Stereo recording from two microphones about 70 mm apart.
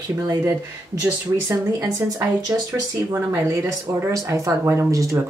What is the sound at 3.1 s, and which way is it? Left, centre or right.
Speech, right.